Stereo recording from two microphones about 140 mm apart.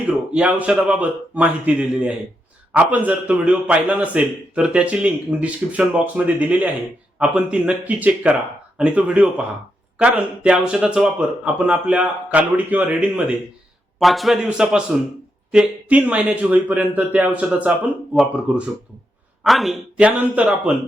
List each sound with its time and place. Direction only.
0.3 s a man's voice: 10° right (ahead or behind)